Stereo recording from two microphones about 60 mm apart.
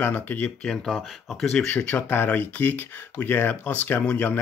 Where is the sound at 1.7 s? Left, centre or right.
Left.